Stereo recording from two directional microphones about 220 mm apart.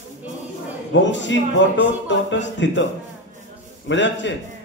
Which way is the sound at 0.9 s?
55° left (ahead or behind).